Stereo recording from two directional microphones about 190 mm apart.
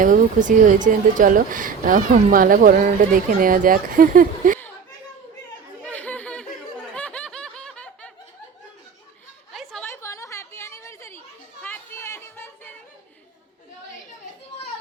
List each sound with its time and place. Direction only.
0.0 s speech: 45° right (ahead or behind)
5.8 s chatter: 10° left (ahead or behind)
6.9 s snicker: 5° left (ahead or behind)
9.5 s chatter: centre (ahead or behind)
9.8 s chatter: 15° left (ahead or behind)
11.6 s a sound: 10° left (ahead or behind)